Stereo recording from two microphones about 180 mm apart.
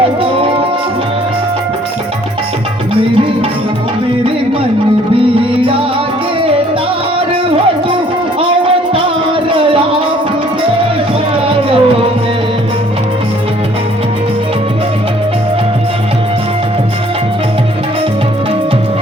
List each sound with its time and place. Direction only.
8.4 s music: 30° right (ahead or behind)
11.4 s music: 30° right (ahead or behind)